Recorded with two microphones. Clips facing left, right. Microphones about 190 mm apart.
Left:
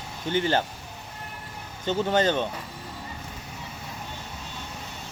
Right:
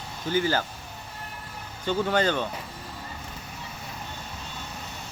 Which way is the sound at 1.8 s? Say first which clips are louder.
Left 1 dB; 20° left (ahead or behind).